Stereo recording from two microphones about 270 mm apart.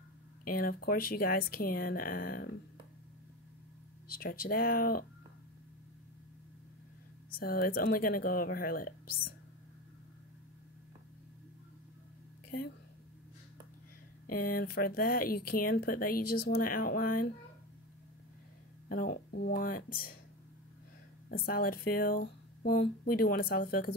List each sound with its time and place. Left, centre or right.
0.5 s speech: left
4.1 s speech: left
7.2 s speech: left
12.5 s speech: left
14.3 s speech: left
18.9 s speech: left
21.5 s speech: left